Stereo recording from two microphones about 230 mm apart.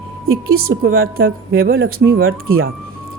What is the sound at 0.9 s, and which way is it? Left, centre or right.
A woman's voice, right.